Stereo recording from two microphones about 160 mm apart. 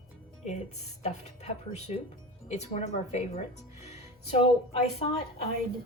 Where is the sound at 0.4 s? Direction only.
45° left (ahead or behind).